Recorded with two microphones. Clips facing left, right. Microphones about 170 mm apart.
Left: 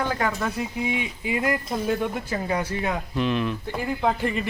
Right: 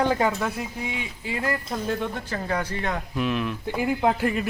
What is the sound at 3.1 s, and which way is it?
Speech, 5° right (ahead or behind).